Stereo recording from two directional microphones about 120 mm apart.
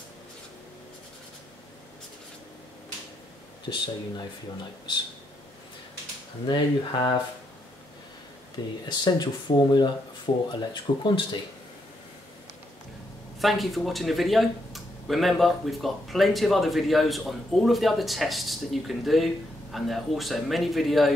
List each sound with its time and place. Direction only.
3.6 s speech: 40° left (ahead or behind)
6.4 s speech: 45° left (ahead or behind)
8.8 s speech: 35° left (ahead or behind)
13.4 s speech: centre (ahead or behind)